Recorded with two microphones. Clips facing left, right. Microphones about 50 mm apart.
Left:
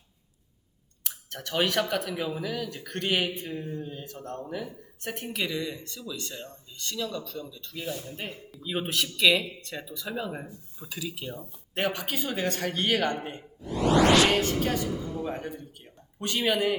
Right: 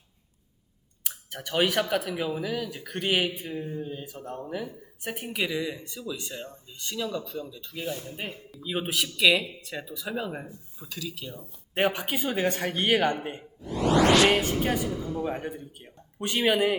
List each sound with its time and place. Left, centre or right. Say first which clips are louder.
1.0 s speech: right 1 dB; centre
8.1 s speech: right 1 dB; centre
10.8 s speech: left 1 dB; centre
11.7 s speech: right 3 dB; centre
14.2 s speech: right 1 dB; centre
14.4 s speech: right 1 dB; centre